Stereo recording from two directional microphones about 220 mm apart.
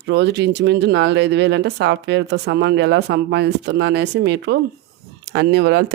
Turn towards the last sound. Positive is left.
turn(degrees=-50)  # may be behind; listen again after turning